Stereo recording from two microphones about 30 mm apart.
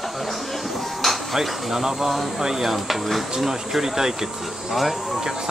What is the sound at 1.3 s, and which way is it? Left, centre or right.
Speech, centre.